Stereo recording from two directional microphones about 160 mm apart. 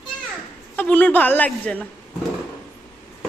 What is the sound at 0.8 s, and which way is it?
A woman's voice, 10° left (ahead or behind).